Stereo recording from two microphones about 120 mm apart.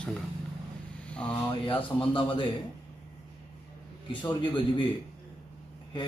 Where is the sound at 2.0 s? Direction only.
45° left (ahead or behind).